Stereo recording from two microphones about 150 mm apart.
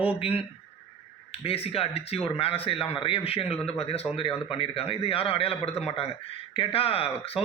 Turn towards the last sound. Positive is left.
turn(degrees=40)  # may be behind; listen again after turning